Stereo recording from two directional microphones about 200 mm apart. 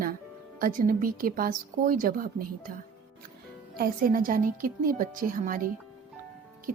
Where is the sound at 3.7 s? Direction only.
45° right (ahead or behind).